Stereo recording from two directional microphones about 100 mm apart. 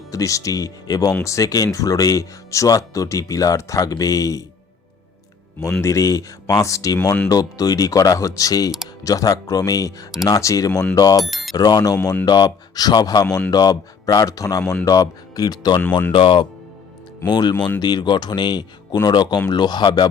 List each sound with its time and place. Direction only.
0.1 s speech: 35° left (ahead or behind)
5.8 s speech: 35° left (ahead or behind)
11.2 s speech: centre (ahead or behind)
11.5 s speech: 40° left (ahead or behind)
15.8 s speech: 20° left (ahead or behind)
16.1 s speech: 55° left (ahead or behind)
17.2 s speech: 45° left (ahead or behind)